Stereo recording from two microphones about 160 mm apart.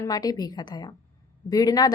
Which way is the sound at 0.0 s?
25° left (ahead or behind).